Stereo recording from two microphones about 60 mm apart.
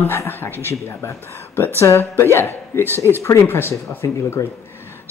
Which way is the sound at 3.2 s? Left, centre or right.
Left.